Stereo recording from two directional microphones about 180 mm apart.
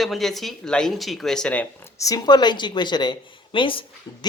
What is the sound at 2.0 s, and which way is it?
Speech, 20° left (ahead or behind).